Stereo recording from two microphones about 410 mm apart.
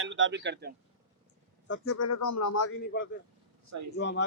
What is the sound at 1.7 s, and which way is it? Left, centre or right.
A man's voice, left.